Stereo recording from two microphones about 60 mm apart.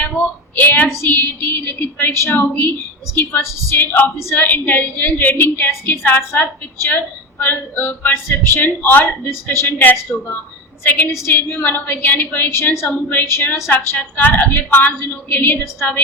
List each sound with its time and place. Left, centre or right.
0.2 s a woman's voice: left
2.1 s a woman's voice: left
2.4 s a woman's voice: left
3.7 s a woman's voice: left
12.5 s a woman's voice: left
12.9 s a woman's voice: left